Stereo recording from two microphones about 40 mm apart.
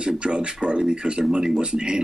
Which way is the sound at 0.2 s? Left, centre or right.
Right.